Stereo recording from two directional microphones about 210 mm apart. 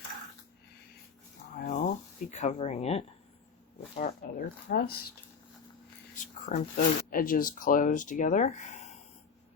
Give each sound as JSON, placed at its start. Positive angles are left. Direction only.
{"t": 1.5, "sound": "a sound", "side_deg": 40}
{"t": 2.3, "sound": "speech", "side_deg": 35}
{"t": 3.9, "sound": "speech", "side_deg": 40}
{"t": 6.1, "sound": "speech", "side_deg": 40}